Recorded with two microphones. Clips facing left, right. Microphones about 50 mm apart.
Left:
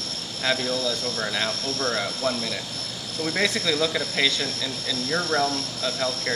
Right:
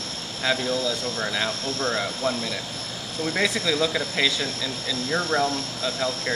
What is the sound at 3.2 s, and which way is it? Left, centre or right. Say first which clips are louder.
Speech: even; centre.